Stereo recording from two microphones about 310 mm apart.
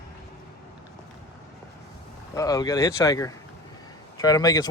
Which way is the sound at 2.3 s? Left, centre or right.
Centre.